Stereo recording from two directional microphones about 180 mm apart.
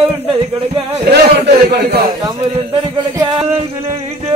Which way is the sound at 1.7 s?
60° right (ahead or behind).